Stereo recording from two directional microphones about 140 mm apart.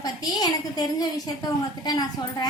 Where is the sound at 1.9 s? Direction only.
30° left (ahead or behind).